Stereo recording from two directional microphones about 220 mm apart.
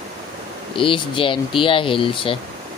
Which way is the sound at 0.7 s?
25° left (ahead or behind).